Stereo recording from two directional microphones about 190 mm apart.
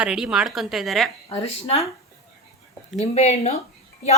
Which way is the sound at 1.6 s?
30° left (ahead or behind).